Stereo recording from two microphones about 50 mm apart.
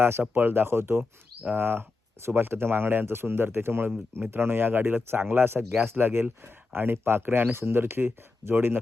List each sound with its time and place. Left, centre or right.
0.0 s speech: right